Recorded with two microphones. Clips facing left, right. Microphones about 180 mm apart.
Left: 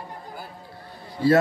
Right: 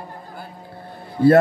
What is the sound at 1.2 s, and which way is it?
Speech, 55° right (ahead or behind).